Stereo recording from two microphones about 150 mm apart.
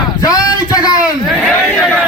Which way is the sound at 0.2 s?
25° left (ahead or behind).